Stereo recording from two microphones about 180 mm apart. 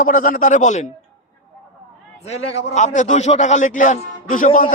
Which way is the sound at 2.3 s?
40° left (ahead or behind).